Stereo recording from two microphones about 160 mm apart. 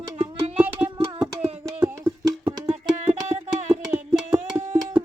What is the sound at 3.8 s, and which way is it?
Music, 10° right (ahead or behind).